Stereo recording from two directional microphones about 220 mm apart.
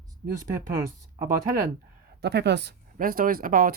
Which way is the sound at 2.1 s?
50° right (ahead or behind).